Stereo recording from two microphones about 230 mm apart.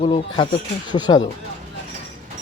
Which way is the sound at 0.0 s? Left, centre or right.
Left.